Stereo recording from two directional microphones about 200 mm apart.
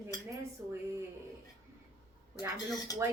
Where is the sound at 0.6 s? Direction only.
10° right (ahead or behind).